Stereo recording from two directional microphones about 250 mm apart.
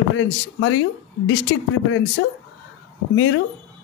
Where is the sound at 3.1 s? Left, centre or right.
Left.